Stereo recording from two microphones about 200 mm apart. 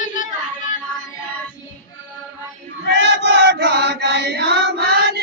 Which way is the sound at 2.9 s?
60° right (ahead or behind).